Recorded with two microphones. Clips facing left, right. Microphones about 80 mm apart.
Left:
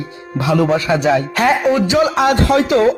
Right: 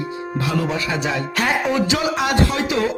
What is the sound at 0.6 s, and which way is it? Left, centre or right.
Music, left.